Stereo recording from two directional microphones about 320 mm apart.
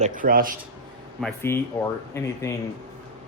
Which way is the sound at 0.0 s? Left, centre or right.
Right.